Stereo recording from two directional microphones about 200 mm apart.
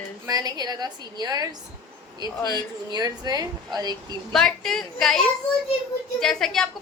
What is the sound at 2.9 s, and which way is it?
A woman's voice, 20° right (ahead or behind).